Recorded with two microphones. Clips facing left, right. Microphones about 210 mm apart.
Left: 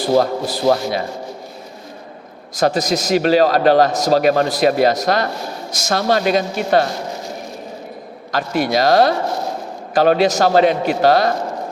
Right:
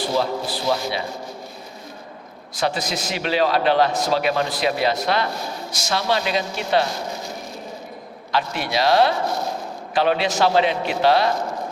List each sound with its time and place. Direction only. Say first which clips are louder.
0.1 s a man's voice: left 10 dB; 50° left (ahead or behind)
2.6 s a man's voice: left 7 dB; 40° left (ahead or behind)
8.3 s a man's voice: left 6 dB; 45° left (ahead or behind)